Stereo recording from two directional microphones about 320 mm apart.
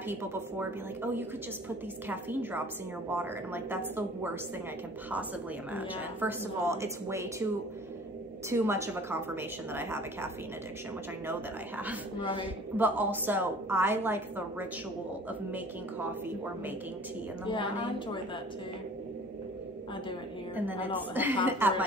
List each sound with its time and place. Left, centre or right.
0.1 s a woman's voice: centre
5.7 s a woman's voice: centre
8.5 s a woman's voice: centre
12.2 s a woman's voice: centre
12.7 s a woman's voice: centre
17.5 s a woman's voice: centre
20.5 s a woman's voice: centre